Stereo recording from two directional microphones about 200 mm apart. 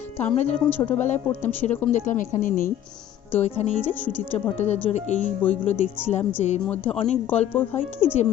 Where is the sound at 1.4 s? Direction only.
35° left (ahead or behind).